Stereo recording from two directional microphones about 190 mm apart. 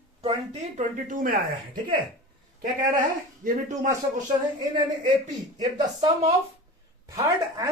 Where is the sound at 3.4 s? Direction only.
40° right (ahead or behind).